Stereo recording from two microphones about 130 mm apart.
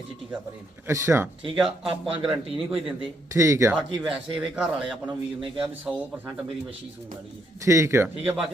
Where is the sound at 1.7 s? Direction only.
45° right (ahead or behind).